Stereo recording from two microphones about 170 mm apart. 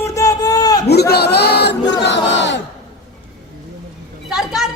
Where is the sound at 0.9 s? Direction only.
70° left (ahead or behind).